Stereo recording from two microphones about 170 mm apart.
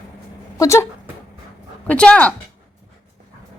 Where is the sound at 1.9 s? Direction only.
5° left (ahead or behind).